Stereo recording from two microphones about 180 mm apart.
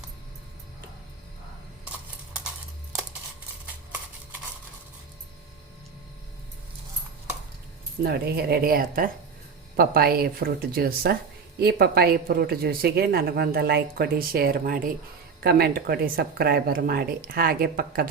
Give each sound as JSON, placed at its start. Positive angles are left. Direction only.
{"t": 8.0, "sound": "speech", "side_deg": -60}